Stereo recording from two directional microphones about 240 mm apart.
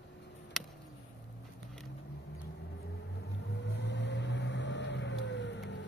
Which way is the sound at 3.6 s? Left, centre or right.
Left.